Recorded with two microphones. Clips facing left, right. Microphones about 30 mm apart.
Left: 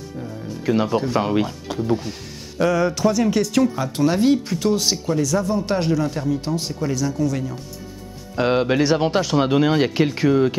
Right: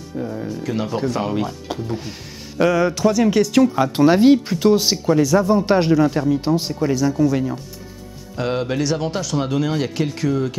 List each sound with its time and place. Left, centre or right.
0.2 s music: right
0.7 s speech: centre
2.0 s speech: centre
3.7 s speech: right
8.4 s speech: centre